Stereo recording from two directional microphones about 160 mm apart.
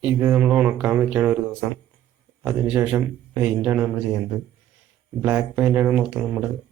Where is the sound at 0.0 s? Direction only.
10° right (ahead or behind).